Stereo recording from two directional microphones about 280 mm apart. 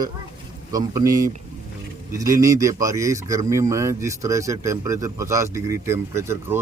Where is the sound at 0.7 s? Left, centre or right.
Centre.